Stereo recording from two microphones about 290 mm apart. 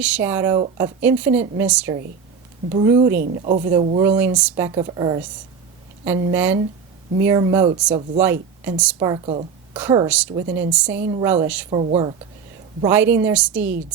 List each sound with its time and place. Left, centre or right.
0.0 s speech: centre
2.6 s a woman's voice: centre
11.7 s speech: centre
12.8 s a woman's voice: centre